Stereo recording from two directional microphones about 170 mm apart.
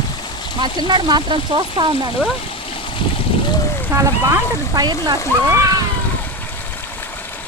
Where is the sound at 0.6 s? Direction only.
25° right (ahead or behind).